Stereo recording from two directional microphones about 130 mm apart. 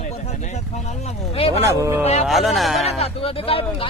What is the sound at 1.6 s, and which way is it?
Speech, 25° right (ahead or behind).